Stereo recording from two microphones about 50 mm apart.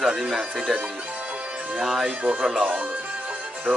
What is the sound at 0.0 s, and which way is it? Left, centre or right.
Speech, centre.